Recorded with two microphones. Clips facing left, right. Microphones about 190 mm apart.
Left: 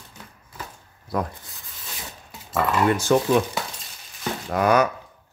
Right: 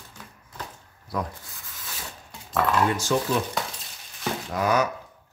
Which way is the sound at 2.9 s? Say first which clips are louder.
Left 5 dB; 60° left (ahead or behind).